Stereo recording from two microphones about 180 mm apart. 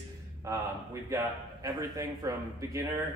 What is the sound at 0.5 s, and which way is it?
A man's voice, 20° right (ahead or behind).